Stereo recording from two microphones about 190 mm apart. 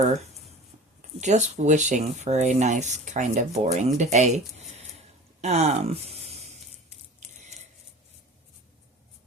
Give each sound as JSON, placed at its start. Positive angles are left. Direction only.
{"t": 0.0, "sound": "speech", "side_deg": -35}